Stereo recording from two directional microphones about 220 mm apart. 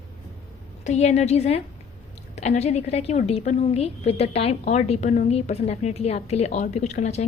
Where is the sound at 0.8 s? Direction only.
30° left (ahead or behind).